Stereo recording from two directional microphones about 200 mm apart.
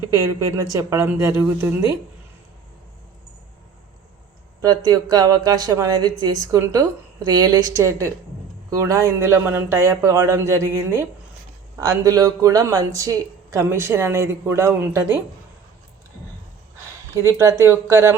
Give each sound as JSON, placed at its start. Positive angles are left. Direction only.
{"t": 0.1, "sound": "speech", "side_deg": -15}
{"t": 4.6, "sound": "speech", "side_deg": -20}
{"t": 17.2, "sound": "speech", "side_deg": -15}